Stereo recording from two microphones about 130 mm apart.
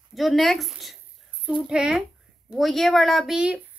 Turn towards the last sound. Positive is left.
turn(degrees=-5)  # may be behind; listen again after turning